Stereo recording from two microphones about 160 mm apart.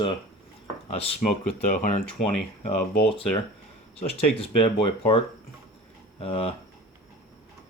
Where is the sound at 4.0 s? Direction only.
35° left (ahead or behind).